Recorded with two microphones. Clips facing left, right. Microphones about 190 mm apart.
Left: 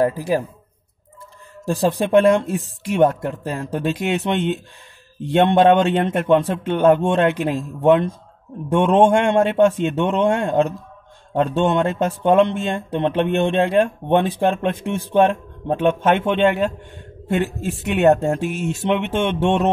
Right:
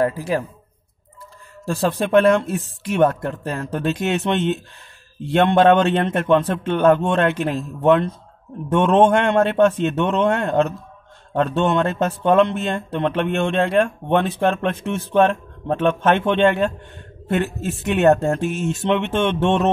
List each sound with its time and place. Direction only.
0.0 s speech: 15° left (ahead or behind)
1.7 s speech: 20° left (ahead or behind)